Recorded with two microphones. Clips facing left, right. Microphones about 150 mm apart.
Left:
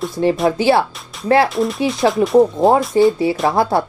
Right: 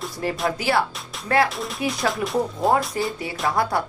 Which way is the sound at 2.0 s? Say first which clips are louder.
Left 12 dB; 25° left (ahead or behind).